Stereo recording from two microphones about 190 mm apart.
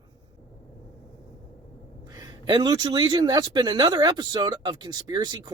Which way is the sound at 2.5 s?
20° right (ahead or behind).